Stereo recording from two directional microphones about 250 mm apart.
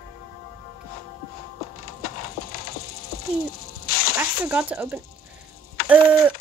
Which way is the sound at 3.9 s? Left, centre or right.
Left.